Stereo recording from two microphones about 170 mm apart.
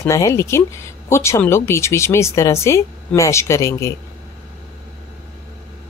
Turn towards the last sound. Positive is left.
turn(degrees=15)  # may be behind; listen again after turning